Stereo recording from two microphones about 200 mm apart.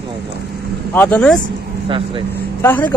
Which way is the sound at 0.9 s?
5° left (ahead or behind).